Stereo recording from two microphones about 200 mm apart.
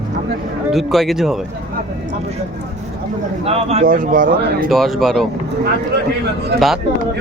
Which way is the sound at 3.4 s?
30° right (ahead or behind).